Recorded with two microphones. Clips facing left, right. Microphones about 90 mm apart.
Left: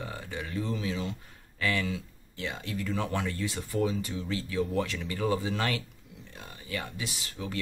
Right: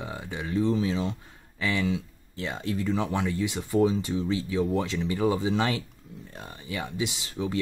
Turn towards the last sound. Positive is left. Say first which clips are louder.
# right 7 dB
turn(degrees=-20)  # may be behind; listen again after turning